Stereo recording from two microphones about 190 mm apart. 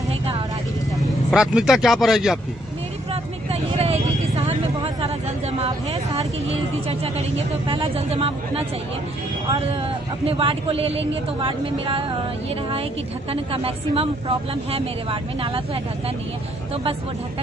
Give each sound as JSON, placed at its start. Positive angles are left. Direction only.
{"t": 0.9, "sound": "speech", "side_deg": -5}
{"t": 3.7, "sound": "vehicle", "side_deg": -30}
{"t": 6.9, "sound": "a sound", "side_deg": -35}
{"t": 9.5, "sound": "a man's voice", "side_deg": -30}
{"t": 13.3, "sound": "a man's voice", "side_deg": -30}